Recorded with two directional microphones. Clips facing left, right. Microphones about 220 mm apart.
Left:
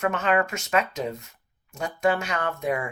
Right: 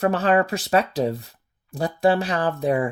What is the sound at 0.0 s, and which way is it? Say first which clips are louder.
Speech: right 4 dB; 35° right (ahead or behind).